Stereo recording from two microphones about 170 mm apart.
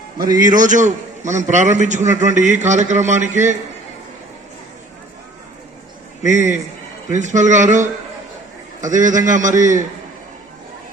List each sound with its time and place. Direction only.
0.5 s a man's voice: 50° right (ahead or behind)
6.2 s a man's voice: 45° right (ahead or behind)